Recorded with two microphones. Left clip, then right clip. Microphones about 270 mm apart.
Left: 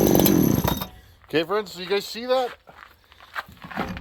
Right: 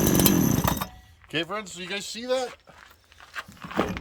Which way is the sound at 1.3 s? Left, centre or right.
Left.